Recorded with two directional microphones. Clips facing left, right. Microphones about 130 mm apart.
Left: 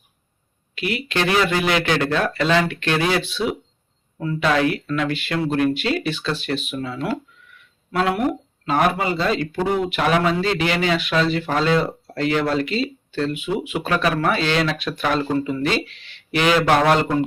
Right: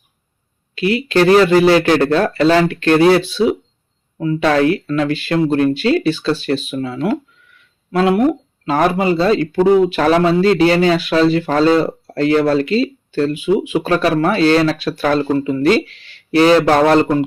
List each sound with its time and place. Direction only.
0.8 s speech: 30° right (ahead or behind)
8.6 s speech: 35° right (ahead or behind)